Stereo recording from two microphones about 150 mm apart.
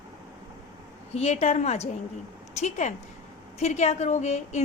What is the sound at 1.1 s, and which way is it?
A woman's voice, 45° left (ahead or behind).